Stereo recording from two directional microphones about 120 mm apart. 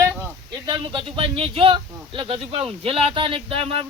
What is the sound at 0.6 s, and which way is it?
Speech, 50° right (ahead or behind).